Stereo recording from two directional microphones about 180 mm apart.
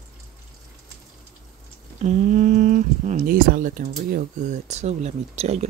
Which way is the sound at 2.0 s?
45° right (ahead or behind).